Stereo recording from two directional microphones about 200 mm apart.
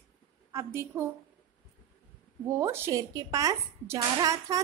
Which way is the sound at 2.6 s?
15° right (ahead or behind).